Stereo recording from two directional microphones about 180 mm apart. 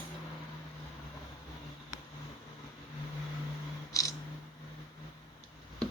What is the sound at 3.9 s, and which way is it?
Cat, 20° left (ahead or behind).